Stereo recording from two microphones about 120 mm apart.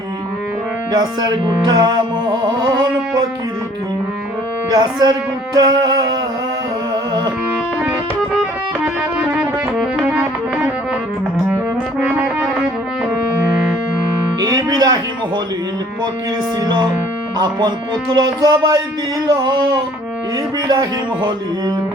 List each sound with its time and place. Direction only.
0.9 s music: 35° right (ahead or behind)
4.8 s music: 35° right (ahead or behind)
9.3 s music: 5° right (ahead or behind)
12.1 s music: 10° right (ahead or behind)
14.4 s music: 35° right (ahead or behind)
18.1 s music: 35° right (ahead or behind)